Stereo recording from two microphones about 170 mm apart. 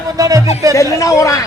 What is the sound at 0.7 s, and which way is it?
Speech, 20° left (ahead or behind).